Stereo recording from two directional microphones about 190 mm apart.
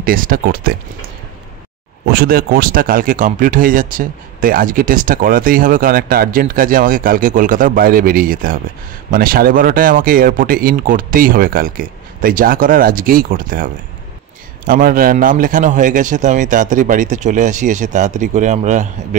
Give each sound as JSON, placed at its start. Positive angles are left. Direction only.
{"t": 0.0, "sound": "speech", "side_deg": -50}
{"t": 2.0, "sound": "speech", "side_deg": -55}
{"t": 14.7, "sound": "a man's voice", "side_deg": -50}